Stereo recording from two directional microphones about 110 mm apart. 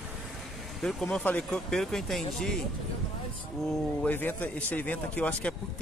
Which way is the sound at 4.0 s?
15° left (ahead or behind).